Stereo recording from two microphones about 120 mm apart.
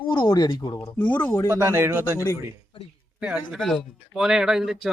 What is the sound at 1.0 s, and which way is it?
Speech, 15° left (ahead or behind).